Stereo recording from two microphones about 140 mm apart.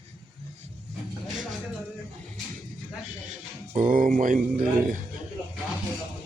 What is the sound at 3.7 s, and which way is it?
Speech, 70° right (ahead or behind).